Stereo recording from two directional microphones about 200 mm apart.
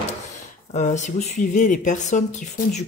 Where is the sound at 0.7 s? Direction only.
35° left (ahead or behind).